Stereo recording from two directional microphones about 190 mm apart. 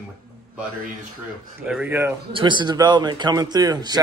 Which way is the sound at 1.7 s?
10° right (ahead or behind).